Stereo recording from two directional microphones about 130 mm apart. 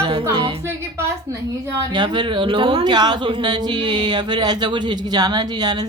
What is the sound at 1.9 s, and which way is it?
A woman's voice, 35° right (ahead or behind).